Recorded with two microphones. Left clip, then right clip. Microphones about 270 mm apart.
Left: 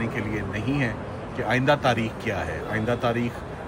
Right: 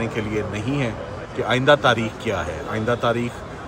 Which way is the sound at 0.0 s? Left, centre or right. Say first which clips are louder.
Right 4 dB; centre.